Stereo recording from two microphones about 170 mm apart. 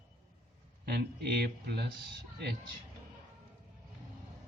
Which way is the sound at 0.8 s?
70° right (ahead or behind).